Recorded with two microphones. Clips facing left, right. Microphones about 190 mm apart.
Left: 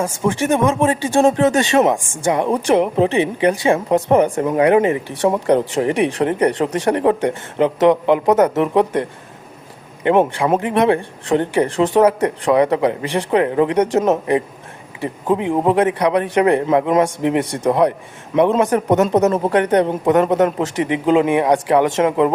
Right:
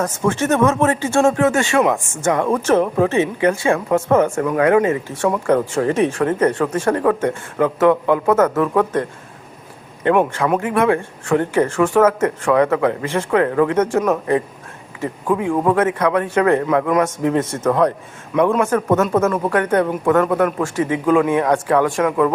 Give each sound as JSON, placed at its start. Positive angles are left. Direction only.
{"t": 0.0, "sound": "a man's voice", "side_deg": 10}